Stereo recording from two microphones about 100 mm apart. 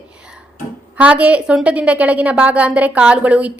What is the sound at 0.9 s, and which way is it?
A woman's voice, 10° right (ahead or behind).